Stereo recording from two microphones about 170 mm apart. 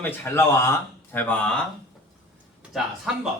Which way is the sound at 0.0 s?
10° left (ahead or behind).